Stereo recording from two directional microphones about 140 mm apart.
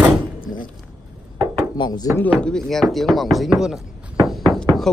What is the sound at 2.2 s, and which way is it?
Speech, 10° left (ahead or behind).